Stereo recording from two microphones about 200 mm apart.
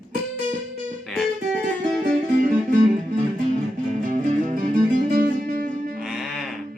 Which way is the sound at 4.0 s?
40° right (ahead or behind).